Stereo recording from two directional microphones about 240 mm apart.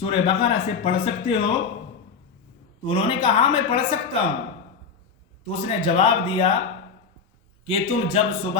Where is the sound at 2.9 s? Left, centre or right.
Left.